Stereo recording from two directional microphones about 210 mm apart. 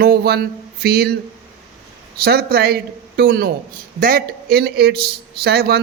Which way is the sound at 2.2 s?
50° right (ahead or behind).